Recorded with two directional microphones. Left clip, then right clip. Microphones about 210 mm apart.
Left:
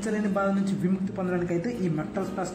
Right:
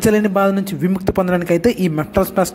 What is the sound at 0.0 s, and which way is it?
A woman's voice, 45° right (ahead or behind).